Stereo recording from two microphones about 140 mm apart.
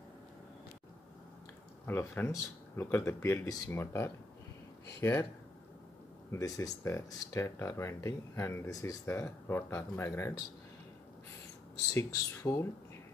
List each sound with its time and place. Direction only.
1.9 s speech: 15° left (ahead or behind)
6.3 s speech: 25° left (ahead or behind)
11.9 s speech: 20° left (ahead or behind)